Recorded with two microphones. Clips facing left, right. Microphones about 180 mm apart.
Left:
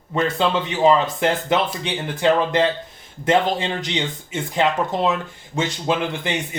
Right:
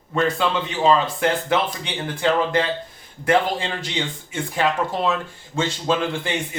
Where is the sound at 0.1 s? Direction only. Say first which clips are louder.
Left 1 dB; 20° left (ahead or behind).